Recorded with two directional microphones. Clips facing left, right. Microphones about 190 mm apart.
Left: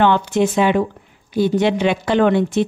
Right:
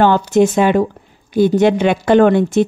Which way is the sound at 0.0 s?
40° right (ahead or behind).